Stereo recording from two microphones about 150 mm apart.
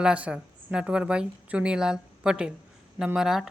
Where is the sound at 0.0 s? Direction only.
10° right (ahead or behind).